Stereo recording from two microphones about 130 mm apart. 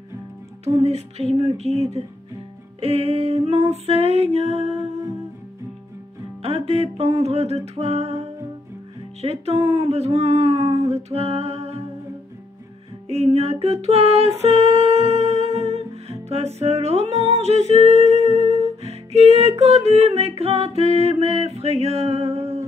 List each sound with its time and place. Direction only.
0.7 s speech: 50° right (ahead or behind)
6.4 s speech: 50° right (ahead or behind)
13.1 s music: 50° right (ahead or behind)